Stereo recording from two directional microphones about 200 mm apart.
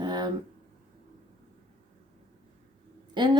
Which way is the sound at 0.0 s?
20° right (ahead or behind).